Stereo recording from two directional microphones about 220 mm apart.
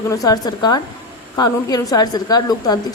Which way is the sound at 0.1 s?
15° left (ahead or behind).